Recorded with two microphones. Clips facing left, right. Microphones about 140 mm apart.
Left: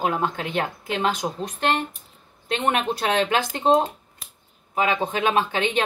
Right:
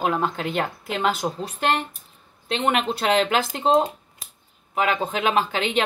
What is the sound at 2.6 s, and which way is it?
Speech, centre (ahead or behind).